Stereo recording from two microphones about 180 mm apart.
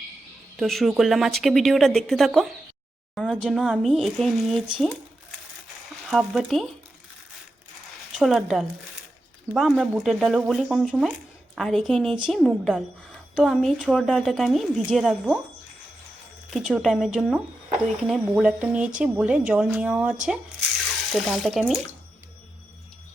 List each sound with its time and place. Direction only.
0.5 s speech: centre (ahead or behind)
8.1 s speech: centre (ahead or behind)
16.5 s speech: centre (ahead or behind)